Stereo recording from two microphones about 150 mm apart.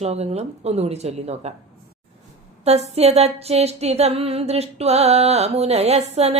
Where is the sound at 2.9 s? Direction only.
45° right (ahead or behind).